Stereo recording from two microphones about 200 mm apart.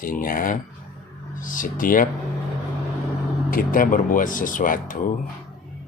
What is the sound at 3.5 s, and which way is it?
Speech, 45° left (ahead or behind).